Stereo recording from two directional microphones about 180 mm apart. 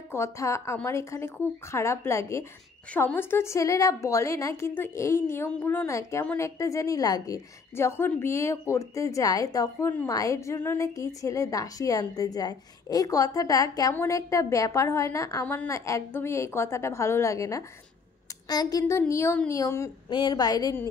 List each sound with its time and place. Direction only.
0.1 s a woman's voice: 15° left (ahead or behind)